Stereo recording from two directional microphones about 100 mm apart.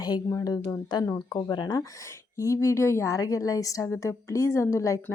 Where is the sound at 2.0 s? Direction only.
30° left (ahead or behind).